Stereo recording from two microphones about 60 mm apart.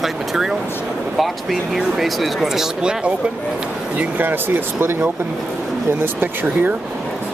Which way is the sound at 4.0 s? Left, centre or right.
Right.